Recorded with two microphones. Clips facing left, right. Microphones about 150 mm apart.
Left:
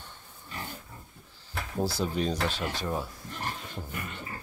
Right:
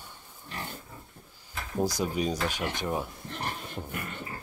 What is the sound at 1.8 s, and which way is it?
Speech, 15° right (ahead or behind).